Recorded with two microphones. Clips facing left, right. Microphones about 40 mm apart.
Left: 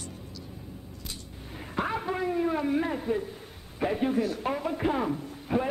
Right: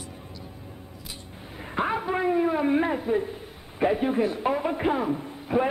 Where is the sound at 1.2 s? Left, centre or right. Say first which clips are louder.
Right 2 dB; right.